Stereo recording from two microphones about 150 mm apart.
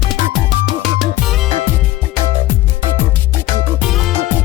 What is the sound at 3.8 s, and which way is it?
Music, centre (ahead or behind).